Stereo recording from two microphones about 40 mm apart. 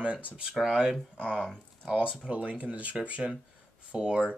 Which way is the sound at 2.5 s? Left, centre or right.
Right.